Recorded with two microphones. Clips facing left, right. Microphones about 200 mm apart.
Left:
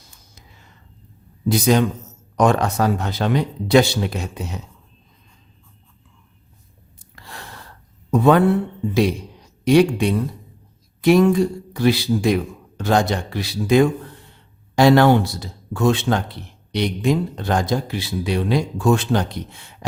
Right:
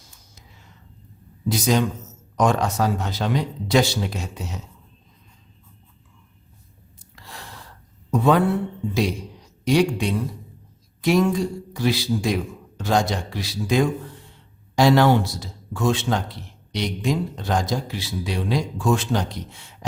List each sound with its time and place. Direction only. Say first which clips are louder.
1.5 s a man's voice: left 4 dB; 60° left (ahead or behind)
7.3 s gasp: left 2 dB; 60° left (ahead or behind)
8.1 s a man's voice: left 4 dB; 60° left (ahead or behind)
9.6 s a man's voice: left 5 dB; 60° left (ahead or behind)